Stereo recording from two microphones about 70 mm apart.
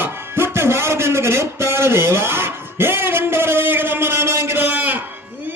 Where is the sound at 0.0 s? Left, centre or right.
Right.